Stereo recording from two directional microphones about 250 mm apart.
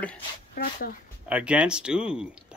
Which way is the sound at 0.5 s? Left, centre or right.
Left.